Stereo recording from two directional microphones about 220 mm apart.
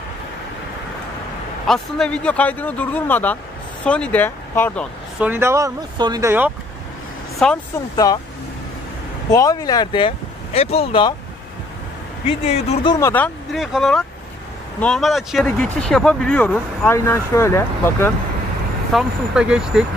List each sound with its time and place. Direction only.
1.7 s speech: 5° left (ahead or behind)
5.2 s speech: 10° right (ahead or behind)
7.4 s speech: 5° left (ahead or behind)
7.9 s speech: 15° left (ahead or behind)
9.3 s speech: 15° left (ahead or behind)
12.3 s speech: 30° left (ahead or behind)
13.1 s speech: 5° left (ahead or behind)
18.9 s speech: 5° right (ahead or behind)